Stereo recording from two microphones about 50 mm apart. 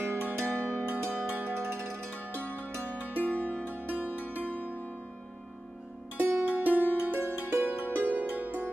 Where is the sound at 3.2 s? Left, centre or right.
Left.